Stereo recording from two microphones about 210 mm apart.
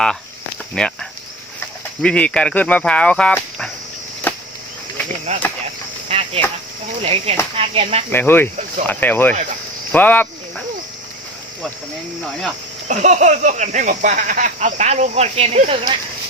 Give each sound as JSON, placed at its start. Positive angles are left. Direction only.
{"t": 0.7, "sound": "speech", "side_deg": 5}
{"t": 2.0, "sound": "speech", "side_deg": 5}
{"t": 4.3, "sound": "a sound", "side_deg": 10}
{"t": 5.3, "sound": "speech", "side_deg": -35}
{"t": 8.1, "sound": "speech", "side_deg": 10}
{"t": 12.9, "sound": "speech", "side_deg": -35}